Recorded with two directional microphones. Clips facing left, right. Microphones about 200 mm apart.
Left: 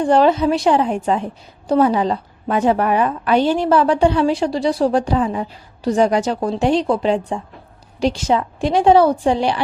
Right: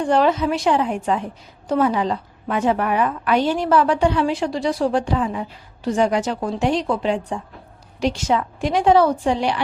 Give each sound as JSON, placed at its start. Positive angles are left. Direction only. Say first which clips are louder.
{"t": 0.0, "sound": "a woman's voice", "louder": "left 4 dB", "side_deg": 35}